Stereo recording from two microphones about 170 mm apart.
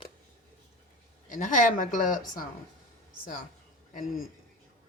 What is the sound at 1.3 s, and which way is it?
Speech, 50° left (ahead or behind).